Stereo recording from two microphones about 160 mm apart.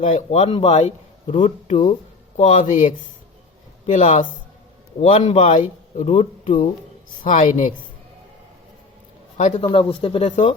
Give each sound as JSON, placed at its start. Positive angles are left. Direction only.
{"t": 0.0, "sound": "a man's voice", "side_deg": 45}
{"t": 7.2, "sound": "a man's voice", "side_deg": 55}
{"t": 9.6, "sound": "speech", "side_deg": 30}